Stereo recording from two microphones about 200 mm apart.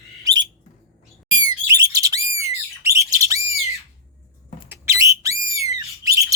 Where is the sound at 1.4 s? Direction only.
20° right (ahead or behind).